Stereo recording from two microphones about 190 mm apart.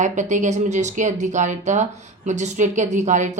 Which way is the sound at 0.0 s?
40° right (ahead or behind).